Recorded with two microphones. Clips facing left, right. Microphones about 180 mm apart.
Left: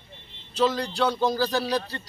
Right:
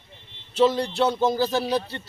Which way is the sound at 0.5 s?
25° right (ahead or behind).